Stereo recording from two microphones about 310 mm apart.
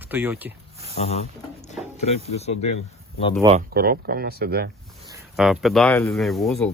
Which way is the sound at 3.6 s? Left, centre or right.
Right.